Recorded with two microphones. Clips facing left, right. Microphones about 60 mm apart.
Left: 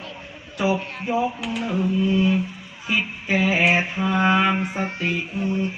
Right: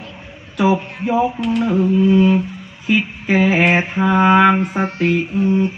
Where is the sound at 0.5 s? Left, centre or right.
Right.